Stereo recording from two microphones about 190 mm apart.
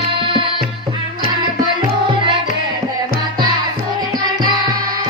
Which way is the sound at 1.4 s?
25° right (ahead or behind).